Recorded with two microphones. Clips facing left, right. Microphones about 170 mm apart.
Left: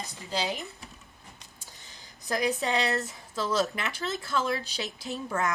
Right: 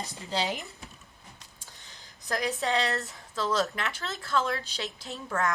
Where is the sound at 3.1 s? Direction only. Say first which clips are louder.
Even; centre (ahead or behind).